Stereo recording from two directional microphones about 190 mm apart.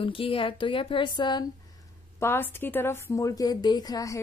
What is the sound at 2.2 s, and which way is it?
A woman's voice, 10° left (ahead or behind).